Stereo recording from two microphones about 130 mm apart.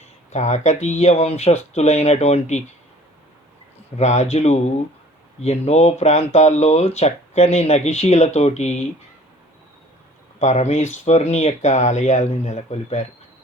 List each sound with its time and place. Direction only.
0.3 s speech: 65° left (ahead or behind)
3.9 s speech: 60° left (ahead or behind)
10.4 s speech: 60° left (ahead or behind)